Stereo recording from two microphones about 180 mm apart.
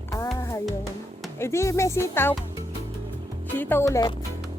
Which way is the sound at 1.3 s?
15° left (ahead or behind).